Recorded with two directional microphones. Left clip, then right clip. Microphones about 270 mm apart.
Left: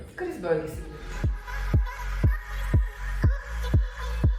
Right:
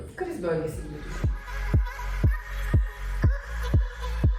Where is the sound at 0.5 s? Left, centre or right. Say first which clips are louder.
Left 4 dB; centre.